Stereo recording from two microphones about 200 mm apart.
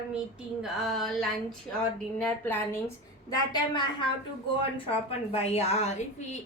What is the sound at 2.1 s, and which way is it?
A woman's voice, 10° left (ahead or behind).